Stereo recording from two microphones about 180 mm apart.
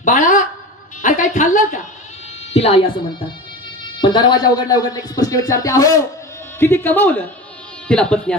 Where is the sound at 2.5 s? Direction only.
35° left (ahead or behind).